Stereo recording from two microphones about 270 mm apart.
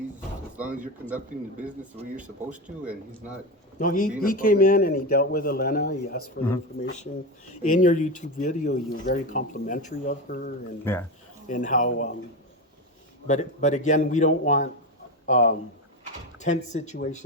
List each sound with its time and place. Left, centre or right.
2.1 s speech: centre
3.8 s a man's voice: left
7.5 s speech: left
10.9 s a man's voice: centre
11.4 s speech: left
13.2 s speech: left